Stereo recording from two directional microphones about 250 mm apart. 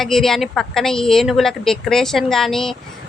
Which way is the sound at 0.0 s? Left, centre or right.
Centre.